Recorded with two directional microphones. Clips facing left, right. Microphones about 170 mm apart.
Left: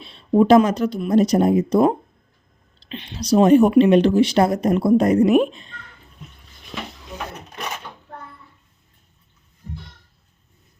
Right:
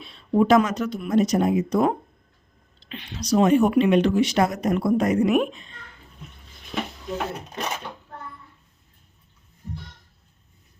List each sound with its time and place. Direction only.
0.0 s a sound: 30° left (ahead or behind)
0.3 s speech: 30° left (ahead or behind)
2.8 s speech: 30° left (ahead or behind)